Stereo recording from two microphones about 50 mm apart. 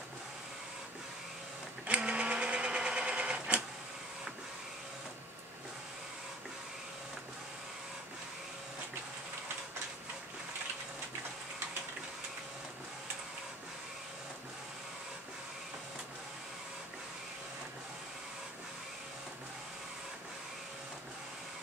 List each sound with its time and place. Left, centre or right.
1.9 s sewing machine: right